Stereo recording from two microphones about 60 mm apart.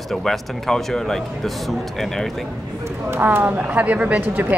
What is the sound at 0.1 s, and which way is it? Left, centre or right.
Speech, centre.